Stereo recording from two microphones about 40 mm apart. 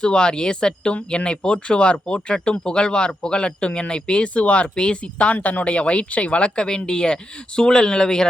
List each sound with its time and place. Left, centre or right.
0.0 s speech: left